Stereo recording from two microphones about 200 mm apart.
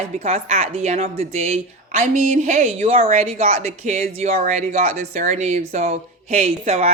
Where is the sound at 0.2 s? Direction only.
30° right (ahead or behind).